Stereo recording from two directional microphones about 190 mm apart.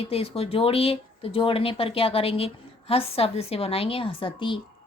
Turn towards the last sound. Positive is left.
turn(degrees=25)  # may be behind; listen again after turning